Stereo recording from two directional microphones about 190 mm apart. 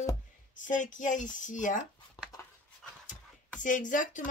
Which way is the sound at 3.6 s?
45° left (ahead or behind).